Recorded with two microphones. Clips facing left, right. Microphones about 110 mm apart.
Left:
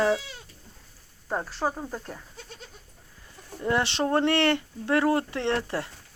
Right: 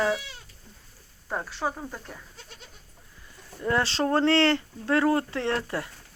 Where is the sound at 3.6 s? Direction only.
20° left (ahead or behind).